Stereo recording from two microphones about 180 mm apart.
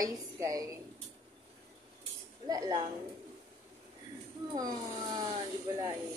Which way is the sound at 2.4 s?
20° right (ahead or behind).